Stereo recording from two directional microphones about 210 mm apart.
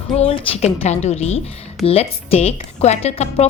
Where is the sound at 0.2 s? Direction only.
30° left (ahead or behind).